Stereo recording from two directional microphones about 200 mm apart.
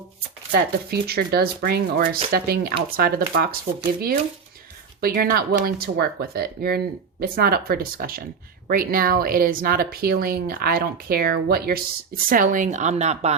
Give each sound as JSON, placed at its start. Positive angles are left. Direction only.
{"t": 0.5, "sound": "speech", "side_deg": -50}
{"t": 4.9, "sound": "speech", "side_deg": -45}